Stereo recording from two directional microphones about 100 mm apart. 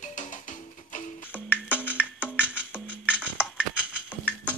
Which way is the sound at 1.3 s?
15° right (ahead or behind).